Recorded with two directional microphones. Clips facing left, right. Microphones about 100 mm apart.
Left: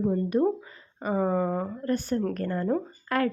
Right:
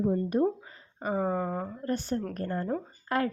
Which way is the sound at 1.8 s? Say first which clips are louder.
Left 3 dB; 25° right (ahead or behind).